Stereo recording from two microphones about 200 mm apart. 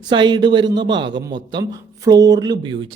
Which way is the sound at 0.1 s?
20° right (ahead or behind).